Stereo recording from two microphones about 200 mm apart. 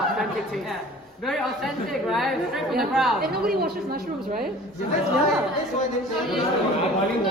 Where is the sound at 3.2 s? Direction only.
50° right (ahead or behind).